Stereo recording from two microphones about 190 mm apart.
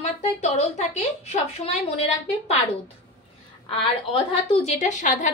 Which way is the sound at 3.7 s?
30° left (ahead or behind).